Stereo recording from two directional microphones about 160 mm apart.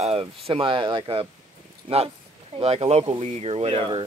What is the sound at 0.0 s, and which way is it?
Speech, 40° right (ahead or behind).